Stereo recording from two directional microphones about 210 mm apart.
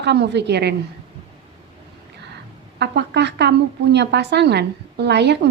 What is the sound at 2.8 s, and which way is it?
A woman's voice, 55° right (ahead or behind).